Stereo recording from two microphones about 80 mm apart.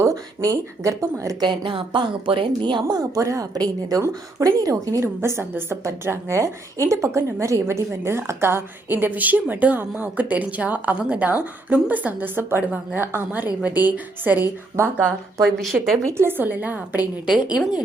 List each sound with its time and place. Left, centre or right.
0.0 s speech: right
1.4 s a woman's voice: right
2.9 s a woman's voice: right
15.4 s speech: centre
16.0 s a woman's voice: right
17.5 s speech: centre